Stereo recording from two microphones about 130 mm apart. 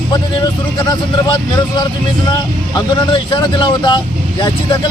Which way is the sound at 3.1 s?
35° left (ahead or behind).